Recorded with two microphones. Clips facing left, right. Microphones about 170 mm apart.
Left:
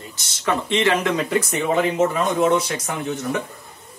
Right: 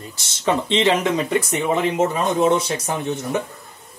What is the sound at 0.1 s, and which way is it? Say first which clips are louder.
Speech: right 2 dB; 25° right (ahead or behind).